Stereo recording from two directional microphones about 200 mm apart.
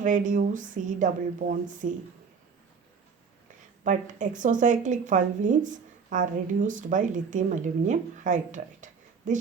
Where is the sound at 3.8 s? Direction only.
40° right (ahead or behind).